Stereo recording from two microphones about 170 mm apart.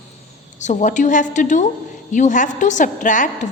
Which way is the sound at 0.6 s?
45° left (ahead or behind).